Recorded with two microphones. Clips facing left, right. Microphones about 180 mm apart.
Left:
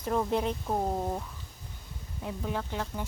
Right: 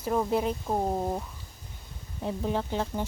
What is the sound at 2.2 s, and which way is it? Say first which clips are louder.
Speech: right 5 dB; 30° right (ahead or behind).